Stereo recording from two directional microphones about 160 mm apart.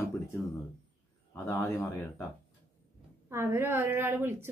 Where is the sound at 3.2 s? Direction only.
15° right (ahead or behind).